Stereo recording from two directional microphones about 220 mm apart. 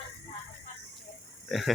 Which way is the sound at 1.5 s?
Centre (ahead or behind).